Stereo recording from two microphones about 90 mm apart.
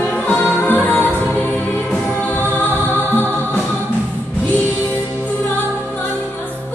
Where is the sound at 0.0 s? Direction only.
20° left (ahead or behind).